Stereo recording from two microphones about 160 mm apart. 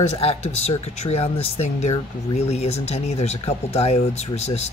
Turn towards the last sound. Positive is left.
turn(degrees=40)  # may be behind; listen again after turning